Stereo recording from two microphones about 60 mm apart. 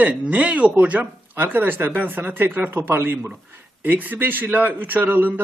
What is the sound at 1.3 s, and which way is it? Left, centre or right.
A man's voice, right.